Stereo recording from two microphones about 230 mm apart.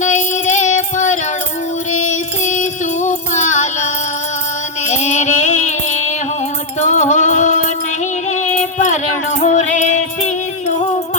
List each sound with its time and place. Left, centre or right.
0.0 s music: left
4.9 s music: left